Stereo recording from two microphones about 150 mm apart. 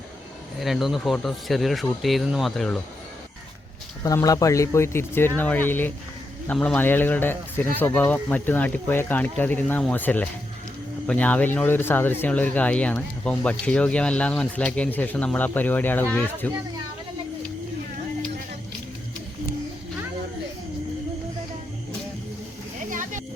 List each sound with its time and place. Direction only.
0.6 s speech: centre (ahead or behind)
4.0 s speech: 25° left (ahead or behind)
22.9 s a sound: 60° right (ahead or behind)